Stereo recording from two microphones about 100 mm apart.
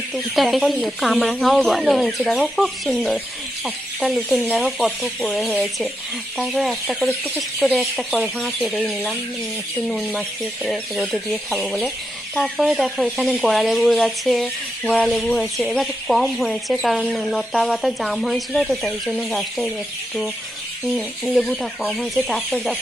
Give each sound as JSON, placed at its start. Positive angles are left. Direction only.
{"t": 0.1, "sound": "speech", "side_deg": 0}
{"t": 8.7, "sound": "speech", "side_deg": 0}
{"t": 20.8, "sound": "speech", "side_deg": 0}